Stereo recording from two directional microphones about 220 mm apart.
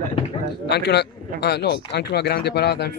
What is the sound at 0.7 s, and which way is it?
Speech, 50° left (ahead or behind).